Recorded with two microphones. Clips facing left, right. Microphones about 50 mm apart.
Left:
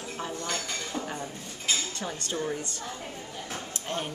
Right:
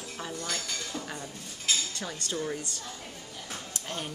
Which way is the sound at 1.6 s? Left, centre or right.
Left.